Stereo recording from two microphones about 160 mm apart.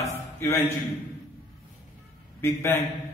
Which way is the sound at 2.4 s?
15° left (ahead or behind).